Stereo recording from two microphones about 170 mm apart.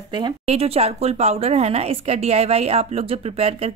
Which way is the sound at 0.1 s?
30° right (ahead or behind).